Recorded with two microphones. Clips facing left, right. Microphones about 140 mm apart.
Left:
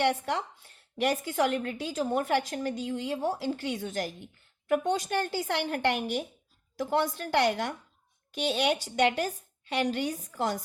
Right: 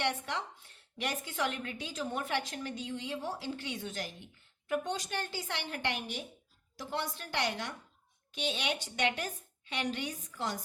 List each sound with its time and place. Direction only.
0.9 s a woman's voice: 40° left (ahead or behind)